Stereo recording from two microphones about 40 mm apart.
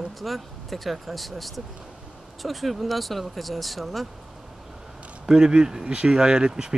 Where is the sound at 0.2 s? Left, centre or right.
Centre.